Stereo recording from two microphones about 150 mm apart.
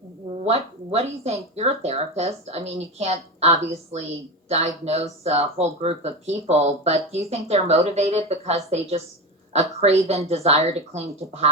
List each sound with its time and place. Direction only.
0.4 s speech: 45° right (ahead or behind)